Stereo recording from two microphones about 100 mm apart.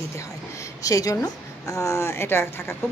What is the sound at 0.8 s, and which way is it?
A woman's voice, 35° left (ahead or behind).